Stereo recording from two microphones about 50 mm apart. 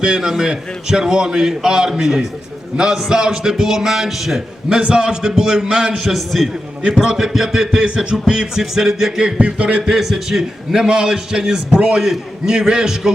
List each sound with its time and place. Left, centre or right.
0.0 s speech: centre
6.8 s speech: centre
9.4 s speech: right
9.9 s speech: centre
11.7 s speech: right
11.9 s speech: centre